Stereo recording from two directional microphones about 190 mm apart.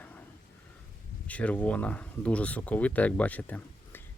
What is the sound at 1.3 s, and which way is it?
Speech, 5° left (ahead or behind).